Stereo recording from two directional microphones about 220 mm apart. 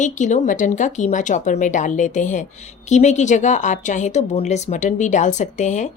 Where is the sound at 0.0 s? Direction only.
35° left (ahead or behind).